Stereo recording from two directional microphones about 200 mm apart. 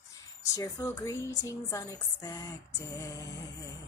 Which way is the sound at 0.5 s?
15° left (ahead or behind).